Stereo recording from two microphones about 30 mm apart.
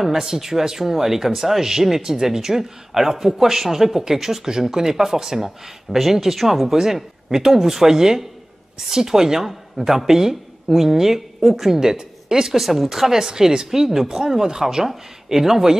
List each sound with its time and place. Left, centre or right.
0.0 s speech: centre
6.7 s speech: centre
12.5 s speech: centre
13.1 s speech: centre
13.7 s speech: centre
14.0 s speech: right